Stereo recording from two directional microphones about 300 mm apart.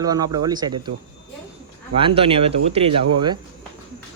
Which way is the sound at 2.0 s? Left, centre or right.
Centre.